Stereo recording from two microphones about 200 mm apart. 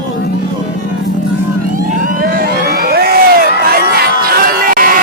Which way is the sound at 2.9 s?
50° right (ahead or behind).